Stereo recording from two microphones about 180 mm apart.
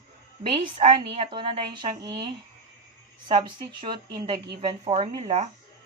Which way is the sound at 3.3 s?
30° right (ahead or behind).